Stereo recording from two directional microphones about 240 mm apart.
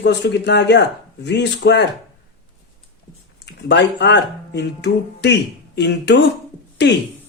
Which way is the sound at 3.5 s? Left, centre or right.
Left.